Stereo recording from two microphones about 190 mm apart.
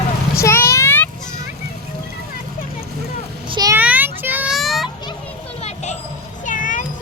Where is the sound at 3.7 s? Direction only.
10° right (ahead or behind).